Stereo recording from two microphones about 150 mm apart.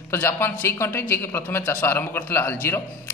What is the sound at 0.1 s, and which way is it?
A man's voice, 15° left (ahead or behind).